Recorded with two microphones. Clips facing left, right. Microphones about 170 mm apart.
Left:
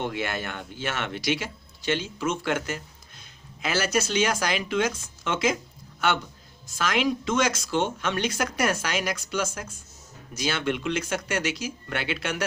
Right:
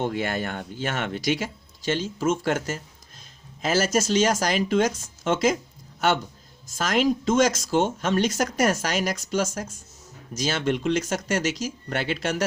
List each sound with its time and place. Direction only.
0.0 s speech: 45° right (ahead or behind)
6.7 s speech: 45° right (ahead or behind)